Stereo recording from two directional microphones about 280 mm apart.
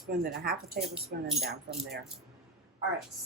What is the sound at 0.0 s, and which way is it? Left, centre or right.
Speech, right.